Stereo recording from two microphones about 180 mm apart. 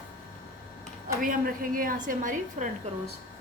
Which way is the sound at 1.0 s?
50° right (ahead or behind).